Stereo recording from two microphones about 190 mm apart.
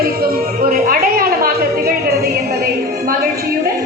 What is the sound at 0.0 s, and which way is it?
Music, 50° right (ahead or behind).